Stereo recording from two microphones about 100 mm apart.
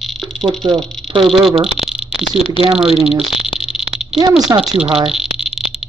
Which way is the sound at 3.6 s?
5° right (ahead or behind).